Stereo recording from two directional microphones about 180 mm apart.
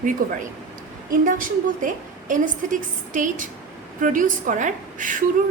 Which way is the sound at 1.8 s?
45° right (ahead or behind).